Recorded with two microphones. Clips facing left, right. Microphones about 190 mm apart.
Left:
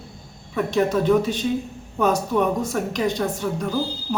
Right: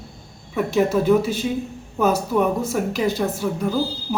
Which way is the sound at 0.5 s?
5° right (ahead or behind).